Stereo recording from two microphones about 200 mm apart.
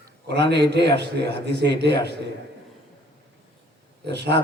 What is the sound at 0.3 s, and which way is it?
A man's voice, 60° right (ahead or behind).